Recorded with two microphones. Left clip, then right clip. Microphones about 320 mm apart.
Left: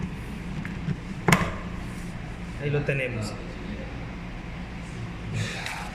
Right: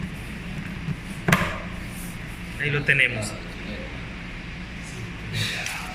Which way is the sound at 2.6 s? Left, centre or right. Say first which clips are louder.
Right 8 dB; centre.